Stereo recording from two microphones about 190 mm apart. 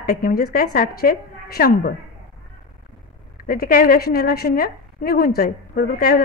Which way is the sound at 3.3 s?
50° left (ahead or behind).